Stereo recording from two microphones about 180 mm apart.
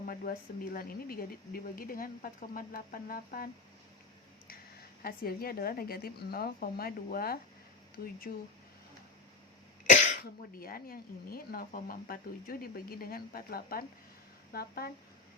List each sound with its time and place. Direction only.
0.0 s speech: 55° left (ahead or behind)
9.9 s speech: 50° left (ahead or behind)